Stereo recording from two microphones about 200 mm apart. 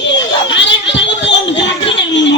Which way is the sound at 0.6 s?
60° left (ahead or behind).